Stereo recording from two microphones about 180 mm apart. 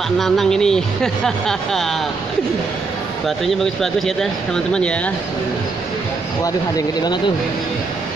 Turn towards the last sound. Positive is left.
turn(degrees=20)  # may be behind; listen again after turning